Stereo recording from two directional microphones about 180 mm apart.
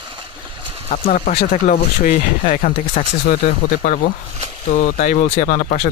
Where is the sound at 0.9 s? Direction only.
40° left (ahead or behind).